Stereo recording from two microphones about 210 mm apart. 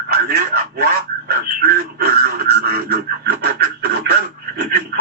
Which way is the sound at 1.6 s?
50° right (ahead or behind).